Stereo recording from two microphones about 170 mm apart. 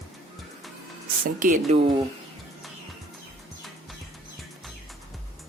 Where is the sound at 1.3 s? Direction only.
50° right (ahead or behind).